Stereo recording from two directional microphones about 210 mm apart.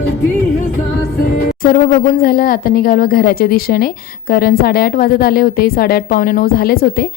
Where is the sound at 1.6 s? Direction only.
40° left (ahead or behind).